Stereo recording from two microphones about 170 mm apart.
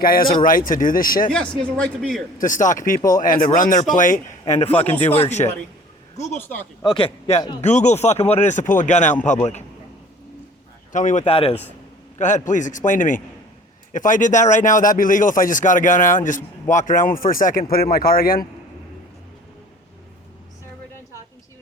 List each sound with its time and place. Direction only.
0.0 s speech: 60° left (ahead or behind)
1.3 s a man's voice: 5° left (ahead or behind)
2.4 s speech: 50° left (ahead or behind)
6.3 s speech: 10° left (ahead or behind)
6.8 s a man's voice: 30° left (ahead or behind)
7.6 s speech: 40° left (ahead or behind)
10.9 s speech: 45° left (ahead or behind)
12.2 s speech: 45° left (ahead or behind)